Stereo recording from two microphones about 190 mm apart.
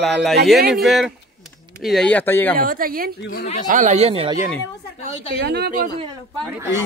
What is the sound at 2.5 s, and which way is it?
Speech, 50° right (ahead or behind).